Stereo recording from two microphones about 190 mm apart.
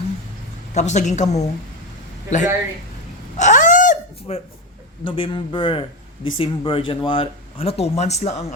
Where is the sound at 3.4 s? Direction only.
40° left (ahead or behind).